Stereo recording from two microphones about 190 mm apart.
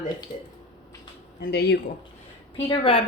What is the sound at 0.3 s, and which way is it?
Speech, 45° left (ahead or behind).